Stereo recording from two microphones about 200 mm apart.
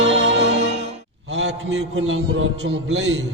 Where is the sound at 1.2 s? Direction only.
70° right (ahead or behind).